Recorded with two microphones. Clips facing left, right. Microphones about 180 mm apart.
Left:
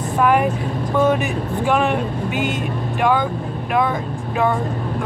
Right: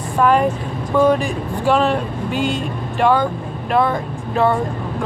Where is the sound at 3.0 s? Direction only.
15° left (ahead or behind).